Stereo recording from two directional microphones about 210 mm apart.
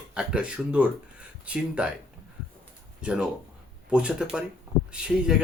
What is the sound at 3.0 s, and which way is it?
Speech, 5° right (ahead or behind).